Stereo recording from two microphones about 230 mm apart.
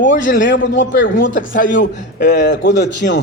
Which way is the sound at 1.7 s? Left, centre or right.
Left.